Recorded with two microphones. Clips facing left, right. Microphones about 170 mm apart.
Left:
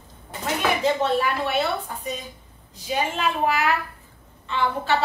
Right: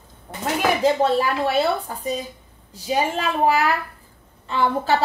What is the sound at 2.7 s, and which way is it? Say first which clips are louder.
A woman's voice: right 4 dB; 35° right (ahead or behind).